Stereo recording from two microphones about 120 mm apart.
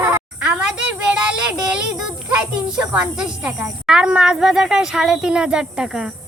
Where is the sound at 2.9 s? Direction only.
10° right (ahead or behind).